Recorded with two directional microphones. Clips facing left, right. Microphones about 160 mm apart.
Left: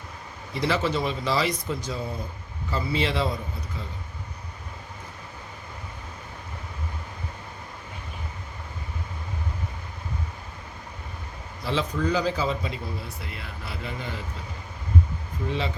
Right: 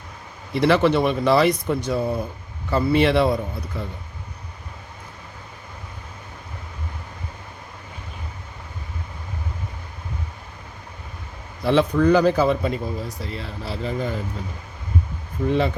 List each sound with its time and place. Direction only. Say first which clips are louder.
0.5 s speech: right 8 dB; 65° right (ahead or behind)
11.6 s speech: right 9 dB; 60° right (ahead or behind); by 14.1 s 35° right (ahead or behind)
15.4 s speech: right 8 dB; 55° right (ahead or behind)